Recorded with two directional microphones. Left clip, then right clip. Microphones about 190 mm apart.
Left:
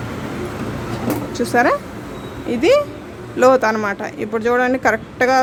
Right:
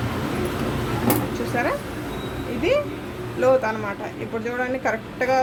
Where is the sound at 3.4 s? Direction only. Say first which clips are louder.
Left 6 dB; 55° left (ahead or behind).